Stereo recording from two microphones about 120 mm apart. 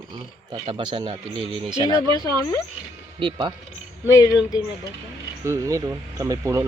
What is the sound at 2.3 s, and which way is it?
Speech, 25° left (ahead or behind).